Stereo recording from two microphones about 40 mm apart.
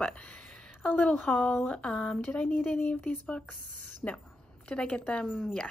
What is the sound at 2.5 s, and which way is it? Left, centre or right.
Speech, left.